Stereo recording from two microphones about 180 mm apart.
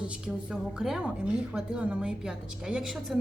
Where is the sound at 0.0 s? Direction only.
5° right (ahead or behind).